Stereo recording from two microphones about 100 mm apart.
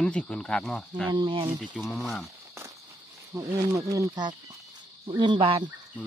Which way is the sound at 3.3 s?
30° right (ahead or behind).